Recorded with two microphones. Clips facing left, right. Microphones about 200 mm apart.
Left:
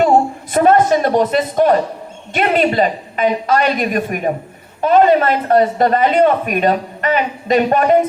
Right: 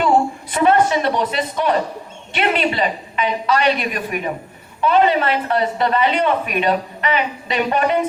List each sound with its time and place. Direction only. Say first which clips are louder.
0.5 s speech: left 4 dB; 45° left (ahead or behind)